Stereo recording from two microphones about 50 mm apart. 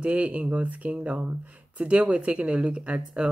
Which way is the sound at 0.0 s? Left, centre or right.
Right.